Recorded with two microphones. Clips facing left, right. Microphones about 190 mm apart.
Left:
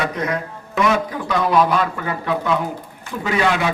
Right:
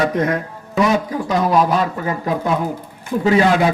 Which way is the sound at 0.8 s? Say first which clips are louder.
Right 2 dB; 35° right (ahead or behind).